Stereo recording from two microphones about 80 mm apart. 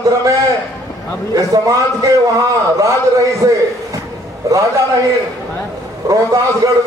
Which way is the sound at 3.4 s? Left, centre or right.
Right.